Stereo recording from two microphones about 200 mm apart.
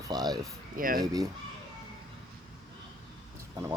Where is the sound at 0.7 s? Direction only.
45° right (ahead or behind).